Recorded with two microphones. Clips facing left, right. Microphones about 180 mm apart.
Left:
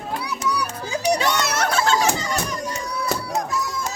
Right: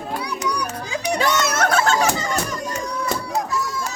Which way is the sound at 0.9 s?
35° left (ahead or behind).